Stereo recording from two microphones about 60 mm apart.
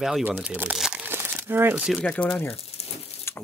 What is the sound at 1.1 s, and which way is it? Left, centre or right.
Crumpling, right.